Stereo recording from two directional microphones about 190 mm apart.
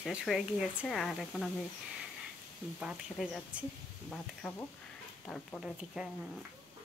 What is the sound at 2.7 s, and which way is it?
Speech, 5° right (ahead or behind).